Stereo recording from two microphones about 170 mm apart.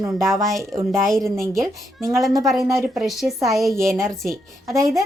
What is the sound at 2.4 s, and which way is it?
A woman's voice, centre (ahead or behind).